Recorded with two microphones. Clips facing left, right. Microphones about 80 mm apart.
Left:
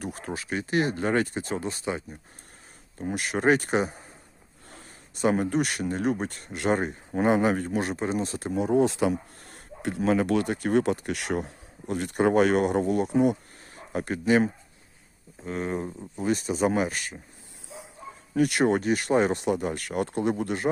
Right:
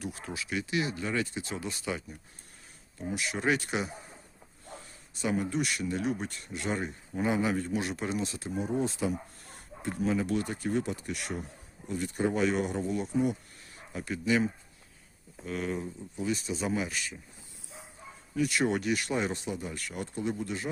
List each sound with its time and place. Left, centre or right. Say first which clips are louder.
0.0 s speech: left 4 dB; left
3.1 s speech: left 6 dB; left
4.7 s speech: right 1 dB; left
8.5 s speech: left 9 dB; left
13.7 s speech: left 7 dB; left
15.4 s speech: left 4 dB; left
18.3 s speech: left 6 dB; left
18.7 s speech: left 7 dB; left